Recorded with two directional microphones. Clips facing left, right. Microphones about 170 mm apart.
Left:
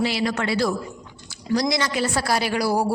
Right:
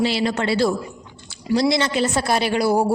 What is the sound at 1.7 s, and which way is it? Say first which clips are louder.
A woman's voice: right 3 dB; 25° right (ahead or behind).